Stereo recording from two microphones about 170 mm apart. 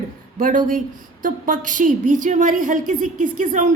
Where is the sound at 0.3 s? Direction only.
50° right (ahead or behind).